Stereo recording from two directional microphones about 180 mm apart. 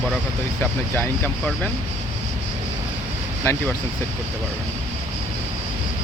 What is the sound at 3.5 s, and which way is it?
Speech, 15° left (ahead or behind).